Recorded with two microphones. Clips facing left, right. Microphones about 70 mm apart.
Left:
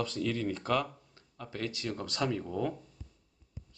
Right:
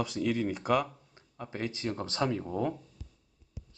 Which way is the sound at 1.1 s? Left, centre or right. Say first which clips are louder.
Right 2 dB; right.